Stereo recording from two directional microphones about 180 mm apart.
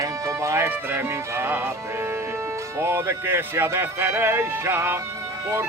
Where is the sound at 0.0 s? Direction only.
15° right (ahead or behind).